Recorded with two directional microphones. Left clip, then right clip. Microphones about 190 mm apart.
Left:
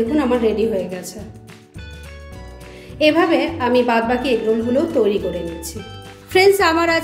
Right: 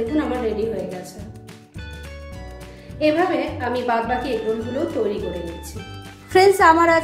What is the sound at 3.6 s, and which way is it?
Speech, 50° left (ahead or behind).